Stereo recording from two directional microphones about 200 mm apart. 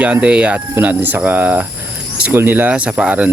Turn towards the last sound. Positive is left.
turn(degrees=-5)  # may be behind; listen again after turning